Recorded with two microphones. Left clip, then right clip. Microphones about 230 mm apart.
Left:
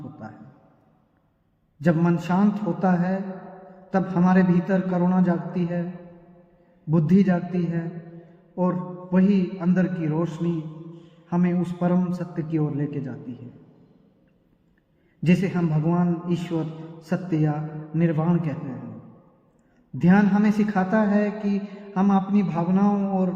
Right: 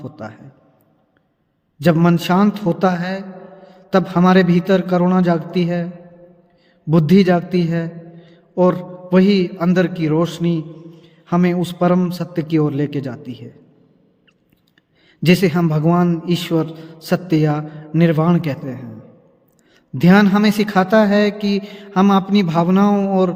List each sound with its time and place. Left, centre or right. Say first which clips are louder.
1.8 s a man's voice: right 8 dB; right
6.9 s a man's voice: right 9 dB; right
15.2 s a man's voice: right 9 dB; right
20.0 s a man's voice: right 8 dB; right